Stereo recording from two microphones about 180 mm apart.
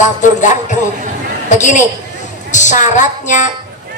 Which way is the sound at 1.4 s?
40° left (ahead or behind).